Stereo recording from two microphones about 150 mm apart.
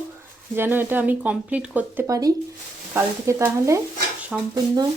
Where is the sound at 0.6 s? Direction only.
15° right (ahead or behind).